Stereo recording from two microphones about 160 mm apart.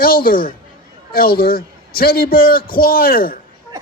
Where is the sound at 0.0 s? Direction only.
65° left (ahead or behind).